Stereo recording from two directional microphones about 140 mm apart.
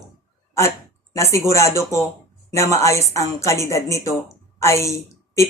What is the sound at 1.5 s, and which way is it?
A woman's voice, 20° left (ahead or behind).